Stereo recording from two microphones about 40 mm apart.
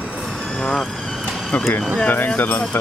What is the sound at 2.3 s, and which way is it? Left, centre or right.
Speech, left.